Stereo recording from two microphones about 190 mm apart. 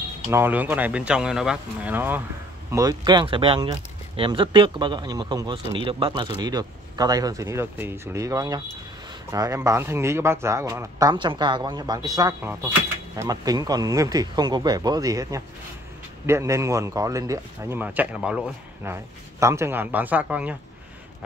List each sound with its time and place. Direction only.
0.3 s speech: 10° right (ahead or behind)